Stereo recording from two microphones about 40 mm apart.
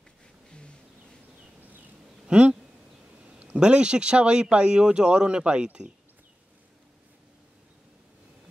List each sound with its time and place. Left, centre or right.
2.2 s speech: right
3.5 s speech: right